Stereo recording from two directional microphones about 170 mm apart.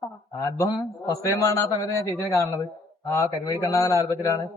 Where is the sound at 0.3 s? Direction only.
20° left (ahead or behind).